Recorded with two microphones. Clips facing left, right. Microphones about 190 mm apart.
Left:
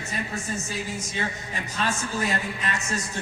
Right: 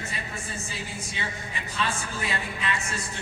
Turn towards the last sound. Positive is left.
turn(degrees=40)  # may be behind; listen again after turning